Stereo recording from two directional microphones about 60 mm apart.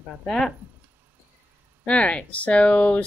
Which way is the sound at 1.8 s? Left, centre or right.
Centre.